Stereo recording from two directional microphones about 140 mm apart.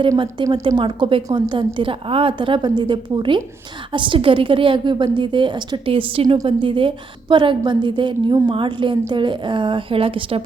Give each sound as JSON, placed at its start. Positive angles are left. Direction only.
{"t": 0.4, "sound": "a woman's voice", "side_deg": -35}